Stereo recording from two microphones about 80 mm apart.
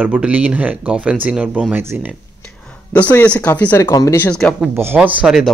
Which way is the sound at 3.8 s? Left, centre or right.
Left.